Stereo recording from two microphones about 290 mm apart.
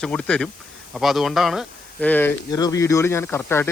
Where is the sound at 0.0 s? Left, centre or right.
Centre.